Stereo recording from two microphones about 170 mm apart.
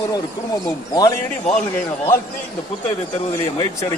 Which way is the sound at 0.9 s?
20° left (ahead or behind).